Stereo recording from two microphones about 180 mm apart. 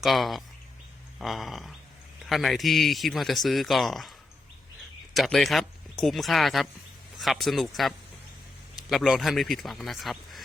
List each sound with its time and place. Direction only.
0.0 s speech: centre (ahead or behind)
5.1 s speech: centre (ahead or behind)